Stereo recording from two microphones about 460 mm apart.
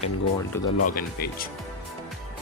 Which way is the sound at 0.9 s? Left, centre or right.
Centre.